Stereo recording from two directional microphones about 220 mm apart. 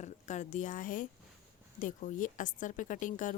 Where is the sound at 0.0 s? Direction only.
35° left (ahead or behind).